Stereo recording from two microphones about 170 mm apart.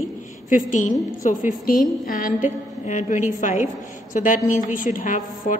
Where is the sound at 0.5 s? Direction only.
50° left (ahead or behind).